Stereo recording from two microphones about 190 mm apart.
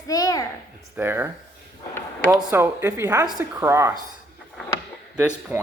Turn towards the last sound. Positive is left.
turn(degrees=-5)  # may be behind; listen again after turning